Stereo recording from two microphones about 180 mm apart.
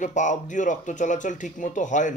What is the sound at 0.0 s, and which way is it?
Speech, 45° left (ahead or behind).